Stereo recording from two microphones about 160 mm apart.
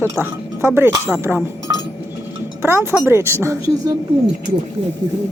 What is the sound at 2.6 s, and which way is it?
A woman's voice, 15° right (ahead or behind).